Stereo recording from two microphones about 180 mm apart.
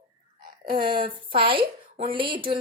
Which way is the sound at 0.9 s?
25° right (ahead or behind).